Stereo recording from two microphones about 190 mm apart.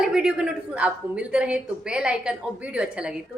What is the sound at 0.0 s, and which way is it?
A woman's voice, 5° right (ahead or behind).